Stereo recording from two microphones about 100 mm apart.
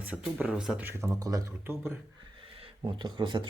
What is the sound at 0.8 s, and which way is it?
Speech, 25° right (ahead or behind).